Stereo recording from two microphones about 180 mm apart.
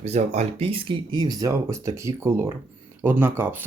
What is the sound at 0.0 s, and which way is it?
Speech, 40° right (ahead or behind).